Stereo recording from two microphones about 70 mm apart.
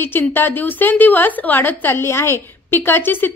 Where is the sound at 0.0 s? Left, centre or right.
Left.